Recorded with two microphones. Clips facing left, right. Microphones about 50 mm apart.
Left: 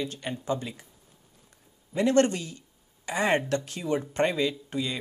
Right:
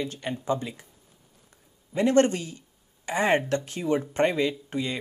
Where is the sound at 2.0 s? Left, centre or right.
Right.